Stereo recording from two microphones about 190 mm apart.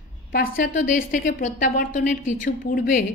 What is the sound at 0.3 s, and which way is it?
A woman's voice, 50° left (ahead or behind).